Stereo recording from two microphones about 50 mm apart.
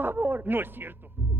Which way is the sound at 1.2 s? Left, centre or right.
Right.